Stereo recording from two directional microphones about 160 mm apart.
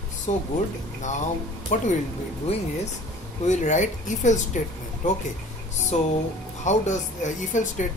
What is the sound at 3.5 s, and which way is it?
Speech, 50° left (ahead or behind).